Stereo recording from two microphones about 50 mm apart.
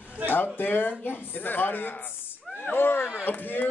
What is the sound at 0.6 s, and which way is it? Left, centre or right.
Speech, left.